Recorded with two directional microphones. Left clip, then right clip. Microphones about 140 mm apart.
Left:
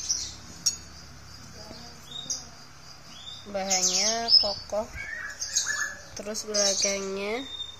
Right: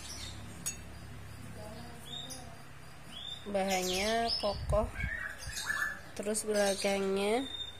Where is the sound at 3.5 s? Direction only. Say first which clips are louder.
Left 5 dB; 25° right (ahead or behind).